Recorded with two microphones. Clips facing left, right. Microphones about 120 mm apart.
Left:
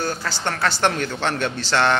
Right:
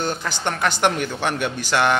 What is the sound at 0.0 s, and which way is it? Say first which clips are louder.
Speech: right 1 dB; 20° right (ahead or behind).